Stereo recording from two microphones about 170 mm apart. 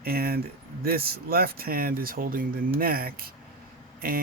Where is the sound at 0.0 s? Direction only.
65° right (ahead or behind).